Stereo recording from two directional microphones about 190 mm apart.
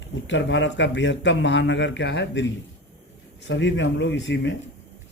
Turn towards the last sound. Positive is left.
turn(degrees=70)  # may be behind; listen again after turning